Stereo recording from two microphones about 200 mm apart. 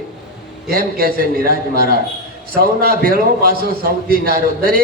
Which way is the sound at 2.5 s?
50° right (ahead or behind).